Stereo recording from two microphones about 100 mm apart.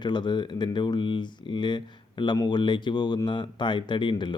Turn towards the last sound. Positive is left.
turn(degrees=50)  # may be behind; listen again after turning